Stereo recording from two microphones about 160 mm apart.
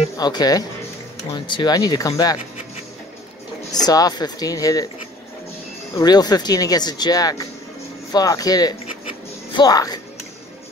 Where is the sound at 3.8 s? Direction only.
25° left (ahead or behind).